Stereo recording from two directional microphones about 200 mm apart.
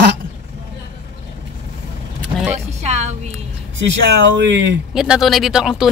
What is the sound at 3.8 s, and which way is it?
Speech, 65° right (ahead or behind).